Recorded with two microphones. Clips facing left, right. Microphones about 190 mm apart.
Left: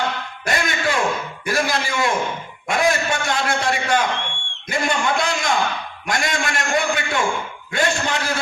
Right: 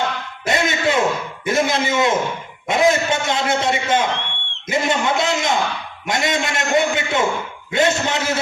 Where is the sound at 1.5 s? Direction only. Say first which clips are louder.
Right 4 dB; 20° right (ahead or behind).